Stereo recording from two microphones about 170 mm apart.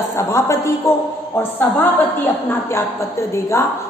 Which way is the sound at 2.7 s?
15° left (ahead or behind).